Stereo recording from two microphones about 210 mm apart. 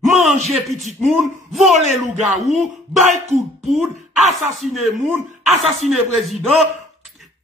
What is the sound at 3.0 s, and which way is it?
Speech, 35° right (ahead or behind).